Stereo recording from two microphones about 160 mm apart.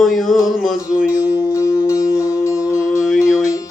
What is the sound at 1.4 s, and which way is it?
Music, 20° left (ahead or behind).